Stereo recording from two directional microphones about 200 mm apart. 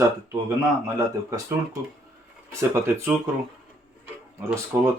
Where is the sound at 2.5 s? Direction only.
15° right (ahead or behind).